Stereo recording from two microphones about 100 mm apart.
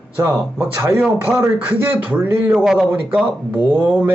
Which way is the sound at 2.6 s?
5° right (ahead or behind).